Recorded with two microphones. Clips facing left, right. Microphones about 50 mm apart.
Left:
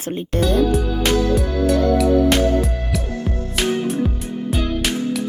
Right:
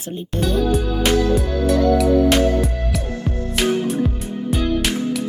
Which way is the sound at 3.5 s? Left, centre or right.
Centre.